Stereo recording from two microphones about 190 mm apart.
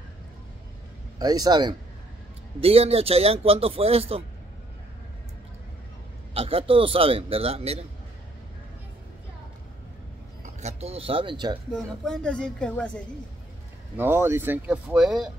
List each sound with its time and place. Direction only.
1.2 s a man's voice: 20° right (ahead or behind)
6.3 s speech: 30° right (ahead or behind)
10.4 s speech: 35° right (ahead or behind)
11.7 s speech: 5° left (ahead or behind)
13.9 s speech: 10° right (ahead or behind)